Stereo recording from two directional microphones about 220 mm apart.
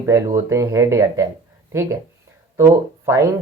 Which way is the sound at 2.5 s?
10° right (ahead or behind).